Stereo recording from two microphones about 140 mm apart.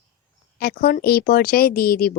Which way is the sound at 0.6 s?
90° left.